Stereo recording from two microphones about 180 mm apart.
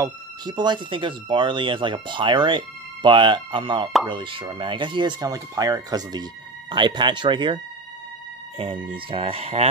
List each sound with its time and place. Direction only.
0.0 s speech: 25° right (ahead or behind)